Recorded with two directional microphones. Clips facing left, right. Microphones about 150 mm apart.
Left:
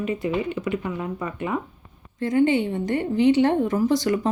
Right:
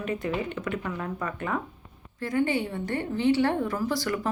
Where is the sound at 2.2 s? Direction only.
20° left (ahead or behind).